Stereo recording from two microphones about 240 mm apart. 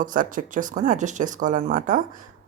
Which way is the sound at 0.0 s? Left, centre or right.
Right.